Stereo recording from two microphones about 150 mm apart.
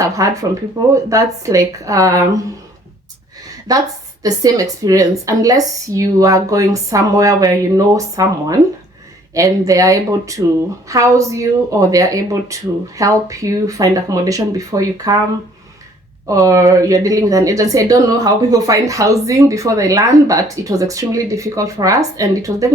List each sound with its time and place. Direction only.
0.2 s speech: 20° right (ahead or behind)
3.7 s speech: 25° right (ahead or behind)
16.2 s speech: 20° right (ahead or behind)